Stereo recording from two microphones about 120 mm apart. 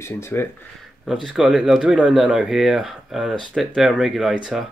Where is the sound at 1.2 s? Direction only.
5° right (ahead or behind).